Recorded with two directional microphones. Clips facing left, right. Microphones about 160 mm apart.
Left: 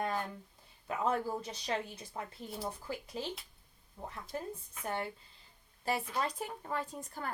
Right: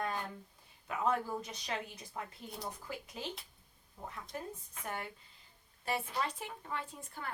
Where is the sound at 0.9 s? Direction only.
30° left (ahead or behind).